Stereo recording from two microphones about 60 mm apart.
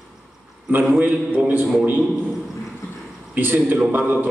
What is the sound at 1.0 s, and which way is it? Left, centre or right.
Speech, right.